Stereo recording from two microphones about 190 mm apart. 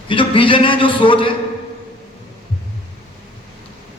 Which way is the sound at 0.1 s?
25° left (ahead or behind).